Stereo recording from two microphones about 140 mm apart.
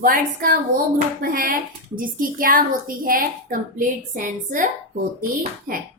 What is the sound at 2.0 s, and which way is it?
A woman's voice, 80° right.